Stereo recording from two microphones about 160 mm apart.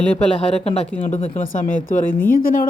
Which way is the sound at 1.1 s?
50° left (ahead or behind).